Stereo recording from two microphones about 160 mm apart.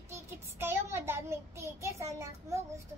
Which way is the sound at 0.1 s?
15° right (ahead or behind).